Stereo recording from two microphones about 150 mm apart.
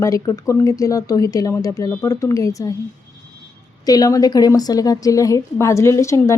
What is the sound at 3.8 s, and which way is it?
A woman's voice, 25° left (ahead or behind).